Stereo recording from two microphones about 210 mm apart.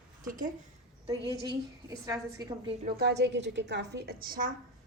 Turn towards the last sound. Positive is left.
turn(degrees=-45)  # may be behind; listen again after turning